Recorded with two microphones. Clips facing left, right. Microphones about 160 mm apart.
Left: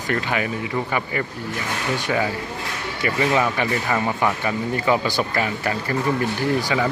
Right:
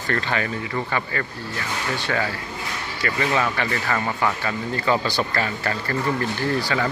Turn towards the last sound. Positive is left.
turn(degrees=15)  # may be behind; listen again after turning